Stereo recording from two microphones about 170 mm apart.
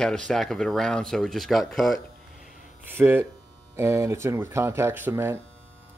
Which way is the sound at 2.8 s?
10° right (ahead or behind).